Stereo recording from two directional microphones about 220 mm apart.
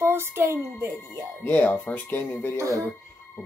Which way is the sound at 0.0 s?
10° right (ahead or behind).